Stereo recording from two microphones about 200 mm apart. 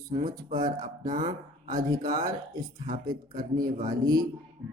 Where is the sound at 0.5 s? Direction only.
20° right (ahead or behind).